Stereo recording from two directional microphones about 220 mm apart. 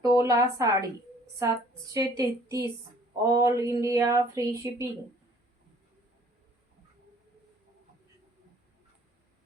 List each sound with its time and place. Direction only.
0.1 s speech: 15° right (ahead or behind)